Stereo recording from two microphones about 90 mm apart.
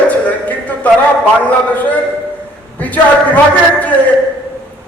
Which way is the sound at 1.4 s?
15° left (ahead or behind).